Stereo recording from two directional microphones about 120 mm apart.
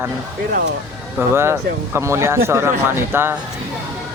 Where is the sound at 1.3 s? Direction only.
20° right (ahead or behind).